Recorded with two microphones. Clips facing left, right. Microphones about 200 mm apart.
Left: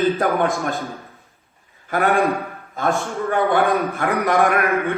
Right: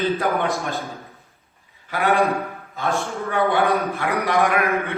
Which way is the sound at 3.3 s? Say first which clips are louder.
Left 1 dB; 45° left (ahead or behind).